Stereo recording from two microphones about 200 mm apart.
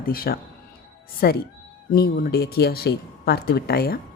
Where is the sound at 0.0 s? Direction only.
45° left (ahead or behind).